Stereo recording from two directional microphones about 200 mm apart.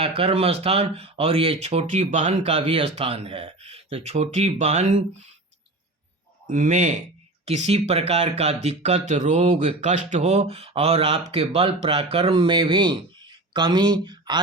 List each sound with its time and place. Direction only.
0.0 s speech: 25° right (ahead or behind)
6.5 s speech: 40° right (ahead or behind); by 14.4 s 20° right (ahead or behind)